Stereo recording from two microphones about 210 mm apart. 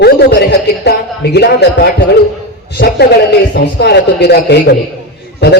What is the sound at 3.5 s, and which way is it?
A man's voice, 55° left (ahead or behind).